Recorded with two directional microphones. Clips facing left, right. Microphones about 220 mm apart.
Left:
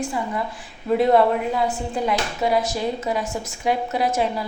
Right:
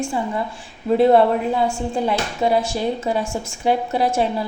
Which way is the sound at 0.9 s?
30° right (ahead or behind).